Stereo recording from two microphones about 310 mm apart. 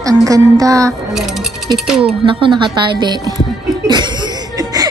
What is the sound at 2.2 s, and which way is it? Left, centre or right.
Speech, centre.